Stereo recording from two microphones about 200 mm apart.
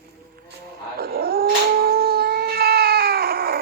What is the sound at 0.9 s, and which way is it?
Dog, 50° right (ahead or behind).